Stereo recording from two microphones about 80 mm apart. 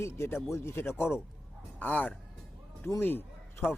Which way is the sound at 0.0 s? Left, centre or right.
Left.